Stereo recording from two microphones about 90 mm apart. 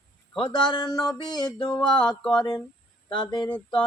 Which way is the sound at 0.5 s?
55° left (ahead or behind).